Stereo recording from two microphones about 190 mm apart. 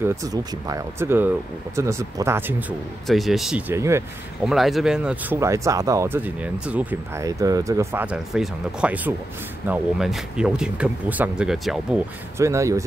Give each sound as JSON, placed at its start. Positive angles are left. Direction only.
{"t": 0.0, "sound": "speech", "side_deg": -15}
{"t": 3.1, "sound": "speech", "side_deg": 0}
{"t": 4.5, "sound": "speech", "side_deg": 0}
{"t": 12.4, "sound": "speech", "side_deg": -15}